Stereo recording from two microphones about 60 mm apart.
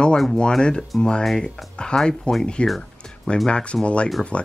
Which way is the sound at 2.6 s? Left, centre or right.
Centre.